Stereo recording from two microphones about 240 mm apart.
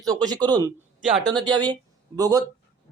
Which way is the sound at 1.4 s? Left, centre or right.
Centre.